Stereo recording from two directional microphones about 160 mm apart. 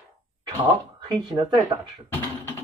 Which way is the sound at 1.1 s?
25° right (ahead or behind).